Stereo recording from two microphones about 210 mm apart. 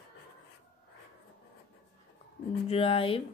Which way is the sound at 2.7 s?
25° left (ahead or behind).